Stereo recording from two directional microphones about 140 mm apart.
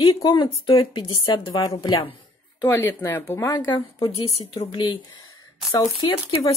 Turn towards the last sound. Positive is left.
turn(degrees=35)  # may be behind; listen again after turning